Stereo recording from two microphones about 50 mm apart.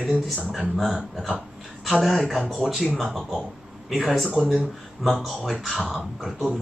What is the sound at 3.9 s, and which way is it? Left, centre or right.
Speech, centre.